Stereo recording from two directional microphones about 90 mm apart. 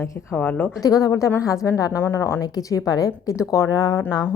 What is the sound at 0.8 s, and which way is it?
A woman's voice, 40° left (ahead or behind).